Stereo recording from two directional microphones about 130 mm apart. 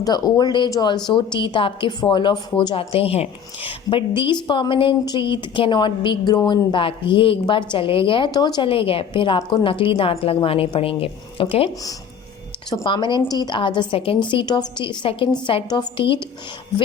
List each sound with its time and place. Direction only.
0.0 s a woman's voice: 30° left (ahead or behind)
12.8 s a woman's voice: 35° left (ahead or behind)